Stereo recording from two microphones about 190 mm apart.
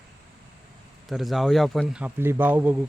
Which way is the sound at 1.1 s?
Centre (ahead or behind).